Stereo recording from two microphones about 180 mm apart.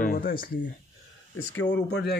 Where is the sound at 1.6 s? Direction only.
75° left (ahead or behind).